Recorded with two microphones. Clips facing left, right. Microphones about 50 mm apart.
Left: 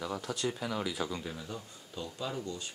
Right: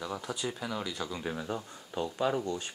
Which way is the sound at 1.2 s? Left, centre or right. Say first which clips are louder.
Right 6 dB; right.